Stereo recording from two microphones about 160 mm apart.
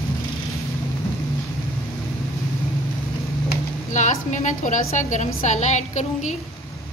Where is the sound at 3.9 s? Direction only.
50° left (ahead or behind).